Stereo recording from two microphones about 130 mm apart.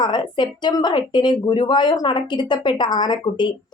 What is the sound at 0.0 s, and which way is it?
A woman's voice, 35° left (ahead or behind).